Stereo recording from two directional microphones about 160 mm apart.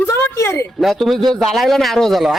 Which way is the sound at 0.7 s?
Centre (ahead or behind).